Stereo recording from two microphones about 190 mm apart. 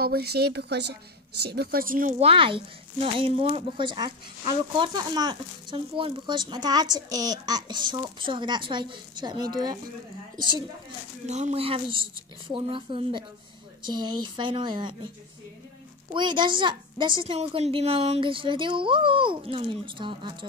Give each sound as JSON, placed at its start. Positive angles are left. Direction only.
{"t": 0.0, "sound": "a woman's voice", "side_deg": -55}
{"t": 2.1, "sound": "a woman's voice", "side_deg": -30}
{"t": 11.2, "sound": "speech", "side_deg": -35}
{"t": 16.1, "sound": "speech", "side_deg": -25}